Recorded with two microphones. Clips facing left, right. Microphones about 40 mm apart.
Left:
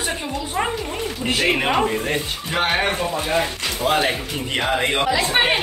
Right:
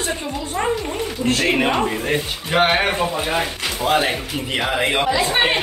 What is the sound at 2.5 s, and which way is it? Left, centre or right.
Speech, centre.